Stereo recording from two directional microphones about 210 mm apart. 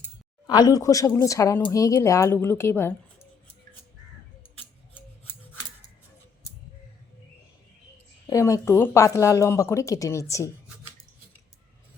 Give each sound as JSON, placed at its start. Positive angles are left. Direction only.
{"t": 0.4, "sound": "speech", "side_deg": 20}
{"t": 8.3, "sound": "speech", "side_deg": 15}